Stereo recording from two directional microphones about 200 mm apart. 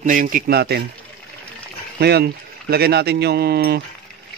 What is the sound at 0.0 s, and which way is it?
Speech, 40° right (ahead or behind).